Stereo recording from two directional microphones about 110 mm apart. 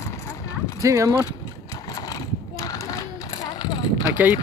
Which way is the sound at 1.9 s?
35° left (ahead or behind).